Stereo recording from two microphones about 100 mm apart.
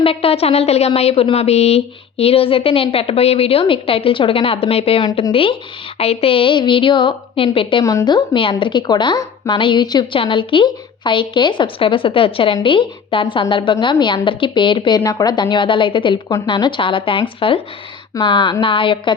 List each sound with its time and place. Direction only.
0.0 s speech: 70° left (ahead or behind)
5.3 s a woman's voice: 65° left (ahead or behind)
6.0 s a woman's voice: 90° left; by 7.9 s 60° left (ahead or behind)
7.9 s a woman's voice: 45° left (ahead or behind)
10.2 s a woman's voice: 60° left (ahead or behind)
18.2 s a woman's voice: 50° left (ahead or behind)